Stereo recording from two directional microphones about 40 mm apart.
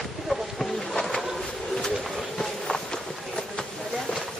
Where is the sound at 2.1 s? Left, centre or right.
Centre.